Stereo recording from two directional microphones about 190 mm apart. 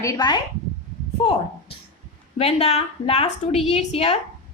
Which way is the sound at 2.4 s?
35° left (ahead or behind).